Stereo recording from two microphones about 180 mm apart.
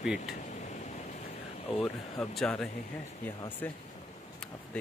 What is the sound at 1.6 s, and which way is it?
Speech, centre (ahead or behind).